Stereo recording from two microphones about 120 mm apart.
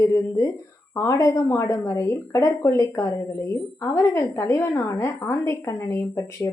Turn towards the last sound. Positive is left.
turn(degrees=20)  # may be behind; listen again after turning